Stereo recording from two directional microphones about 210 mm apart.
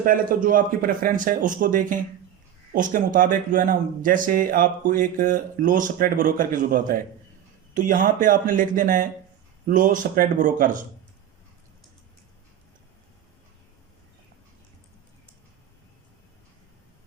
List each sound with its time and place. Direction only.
0.0 s speech: 40° right (ahead or behind)